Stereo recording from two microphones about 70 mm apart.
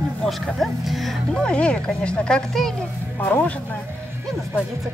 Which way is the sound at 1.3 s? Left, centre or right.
Centre.